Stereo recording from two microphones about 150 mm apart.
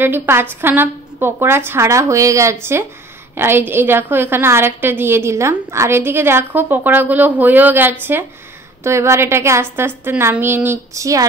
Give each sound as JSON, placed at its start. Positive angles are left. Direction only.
{"t": 0.0, "sound": "a woman's voice", "side_deg": -15}